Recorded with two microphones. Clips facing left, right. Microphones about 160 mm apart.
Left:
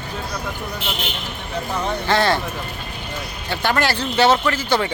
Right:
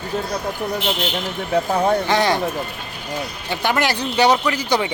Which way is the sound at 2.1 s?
15° right (ahead or behind).